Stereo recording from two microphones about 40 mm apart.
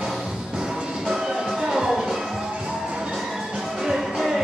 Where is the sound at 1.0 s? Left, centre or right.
Centre.